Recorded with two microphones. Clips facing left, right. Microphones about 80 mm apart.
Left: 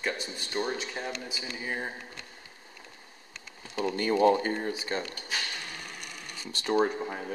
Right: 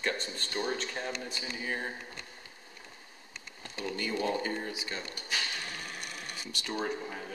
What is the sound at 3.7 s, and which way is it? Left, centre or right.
Speech, left.